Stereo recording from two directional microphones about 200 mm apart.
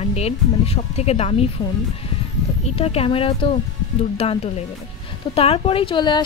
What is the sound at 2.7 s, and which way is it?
A woman's voice, 30° left (ahead or behind).